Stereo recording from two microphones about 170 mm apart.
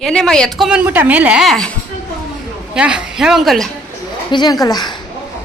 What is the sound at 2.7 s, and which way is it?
Speech, 5° right (ahead or behind).